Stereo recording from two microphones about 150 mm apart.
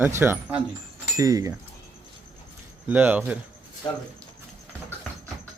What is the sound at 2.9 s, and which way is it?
Speech, 10° right (ahead or behind).